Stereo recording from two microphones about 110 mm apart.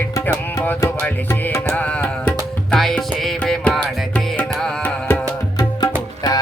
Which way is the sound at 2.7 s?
Centre (ahead or behind).